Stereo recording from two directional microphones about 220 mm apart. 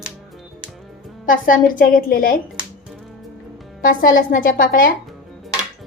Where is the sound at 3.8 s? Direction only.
40° left (ahead or behind).